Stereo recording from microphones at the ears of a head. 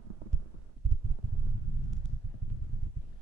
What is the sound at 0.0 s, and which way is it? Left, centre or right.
Heart sounds, right.